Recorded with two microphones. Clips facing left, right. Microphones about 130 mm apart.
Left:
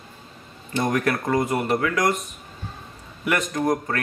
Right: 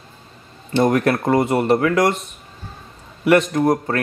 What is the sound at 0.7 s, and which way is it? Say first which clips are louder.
Speech: right 6 dB; 30° right (ahead or behind).